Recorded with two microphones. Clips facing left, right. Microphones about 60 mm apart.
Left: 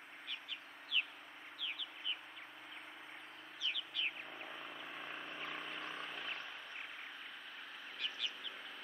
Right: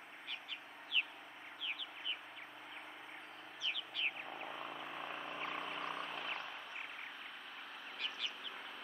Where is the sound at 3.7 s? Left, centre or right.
Centre.